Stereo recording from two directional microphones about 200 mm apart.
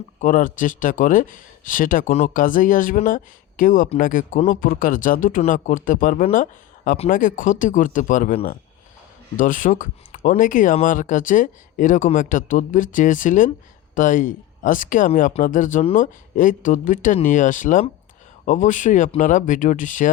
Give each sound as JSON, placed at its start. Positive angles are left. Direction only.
{"t": 0.2, "sound": "speech", "side_deg": 40}